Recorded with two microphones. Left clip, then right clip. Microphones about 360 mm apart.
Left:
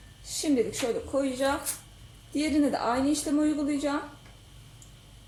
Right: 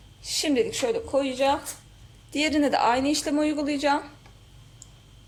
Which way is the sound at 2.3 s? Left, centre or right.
Right.